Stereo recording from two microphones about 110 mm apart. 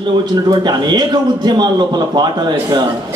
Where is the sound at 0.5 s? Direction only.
40° right (ahead or behind).